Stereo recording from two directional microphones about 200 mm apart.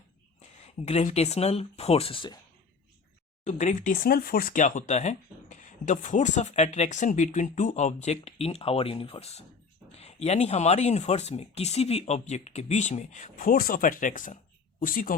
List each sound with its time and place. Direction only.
0.6 s speech: 30° left (ahead or behind)
3.4 s speech: 40° left (ahead or behind)